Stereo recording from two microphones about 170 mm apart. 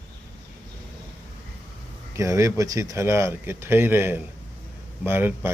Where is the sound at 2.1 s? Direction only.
20° right (ahead or behind).